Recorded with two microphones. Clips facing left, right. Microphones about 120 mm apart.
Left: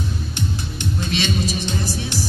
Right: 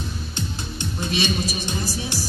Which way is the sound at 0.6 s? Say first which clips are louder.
Left 3 dB; 20° right (ahead or behind).